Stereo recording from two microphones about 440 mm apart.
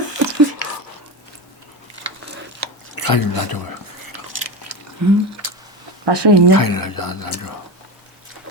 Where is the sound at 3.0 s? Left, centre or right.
Left.